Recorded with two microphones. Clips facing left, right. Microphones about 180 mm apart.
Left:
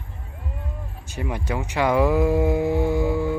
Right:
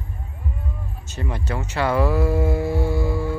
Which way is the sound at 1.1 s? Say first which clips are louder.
Left 1 dB; 10° left (ahead or behind).